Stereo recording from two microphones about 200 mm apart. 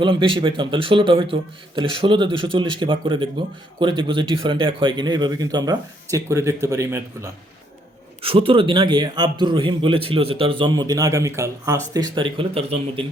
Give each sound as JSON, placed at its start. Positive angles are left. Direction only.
{"t": 0.0, "sound": "speech", "side_deg": -25}
{"t": 8.2, "sound": "speech", "side_deg": -30}